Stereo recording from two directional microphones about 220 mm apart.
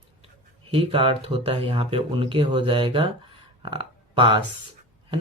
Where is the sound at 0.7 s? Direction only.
25° right (ahead or behind).